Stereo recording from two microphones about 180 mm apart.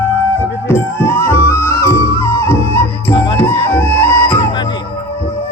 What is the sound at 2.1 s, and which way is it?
Flute, 15° left (ahead or behind).